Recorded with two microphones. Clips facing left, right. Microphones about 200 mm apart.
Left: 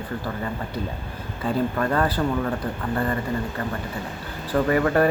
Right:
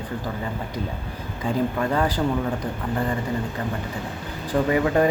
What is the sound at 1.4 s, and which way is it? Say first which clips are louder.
Speech: even; 10° right (ahead or behind).